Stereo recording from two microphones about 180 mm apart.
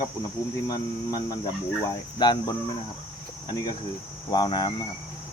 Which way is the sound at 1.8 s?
25° left (ahead or behind).